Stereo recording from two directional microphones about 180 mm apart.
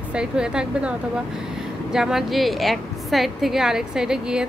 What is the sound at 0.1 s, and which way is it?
A woman's voice, 5° right (ahead or behind).